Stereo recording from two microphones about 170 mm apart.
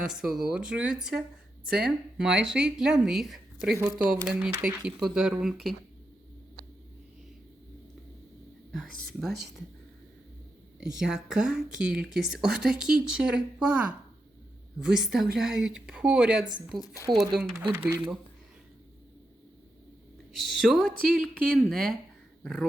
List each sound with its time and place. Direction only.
0.0 s speech: 5° right (ahead or behind)
8.7 s speech: centre (ahead or behind)
10.8 s speech: 5° right (ahead or behind)
20.3 s speech: centre (ahead or behind)